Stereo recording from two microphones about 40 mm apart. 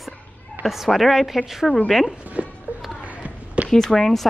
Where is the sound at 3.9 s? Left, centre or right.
Centre.